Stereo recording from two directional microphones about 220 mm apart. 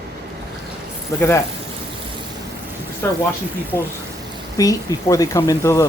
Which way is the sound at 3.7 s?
15° left (ahead or behind).